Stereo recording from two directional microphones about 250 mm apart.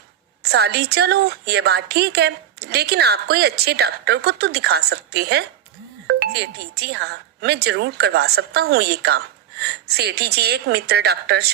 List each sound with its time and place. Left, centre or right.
0.4 s speech: right